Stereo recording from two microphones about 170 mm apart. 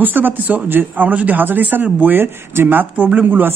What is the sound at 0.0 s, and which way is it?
Speech, 10° right (ahead or behind).